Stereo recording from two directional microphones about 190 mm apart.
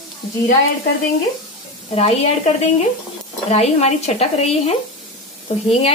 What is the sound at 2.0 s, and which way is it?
Stir, 30° left (ahead or behind).